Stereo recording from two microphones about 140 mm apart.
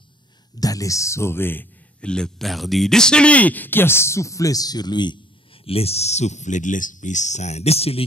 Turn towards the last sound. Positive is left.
turn(degrees=45)  # may be behind; listen again after turning